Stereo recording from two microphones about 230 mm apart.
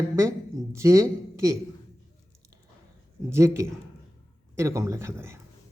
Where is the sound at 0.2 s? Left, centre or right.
Centre.